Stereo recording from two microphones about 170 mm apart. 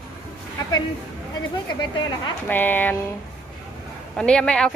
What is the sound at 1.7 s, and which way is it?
Speech, 25° left (ahead or behind).